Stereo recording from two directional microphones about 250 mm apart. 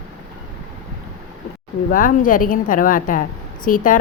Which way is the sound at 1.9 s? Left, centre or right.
Left.